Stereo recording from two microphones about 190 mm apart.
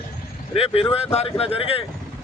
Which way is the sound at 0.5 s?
30° left (ahead or behind).